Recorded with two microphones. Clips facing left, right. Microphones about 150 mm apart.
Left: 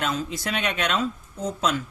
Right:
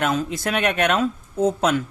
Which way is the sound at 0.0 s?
55° right (ahead or behind).